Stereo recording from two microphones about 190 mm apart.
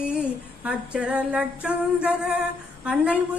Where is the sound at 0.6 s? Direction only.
5° right (ahead or behind).